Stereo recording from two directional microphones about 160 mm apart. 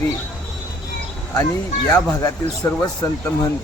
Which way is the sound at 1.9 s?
20° left (ahead or behind).